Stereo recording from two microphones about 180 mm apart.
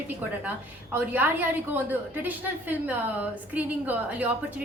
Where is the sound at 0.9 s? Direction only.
10° right (ahead or behind).